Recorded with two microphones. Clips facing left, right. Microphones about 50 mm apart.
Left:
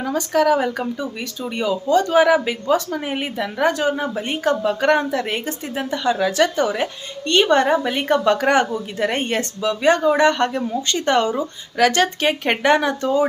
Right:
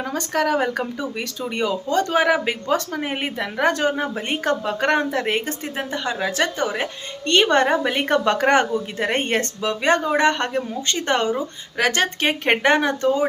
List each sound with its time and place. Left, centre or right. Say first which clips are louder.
0.0 s speech: left 4 dB; right
0.9 s speech: even; right
3.9 s speech: left 1 dB; right
7.3 s speech: left 1 dB; right
8.4 s speech: even; right